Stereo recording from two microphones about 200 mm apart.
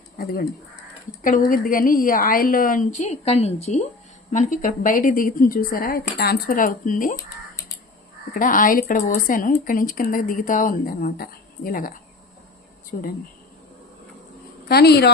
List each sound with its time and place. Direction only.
1.2 s speech: 40° left (ahead or behind)
8.3 s speech: 45° left (ahead or behind)
12.9 s speech: 45° left (ahead or behind)
14.7 s a woman's voice: 55° left (ahead or behind)